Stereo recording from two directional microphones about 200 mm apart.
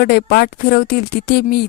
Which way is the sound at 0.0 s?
50° left (ahead or behind).